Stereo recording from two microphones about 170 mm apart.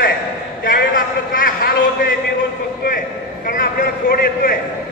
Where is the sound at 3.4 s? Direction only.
60° left (ahead or behind).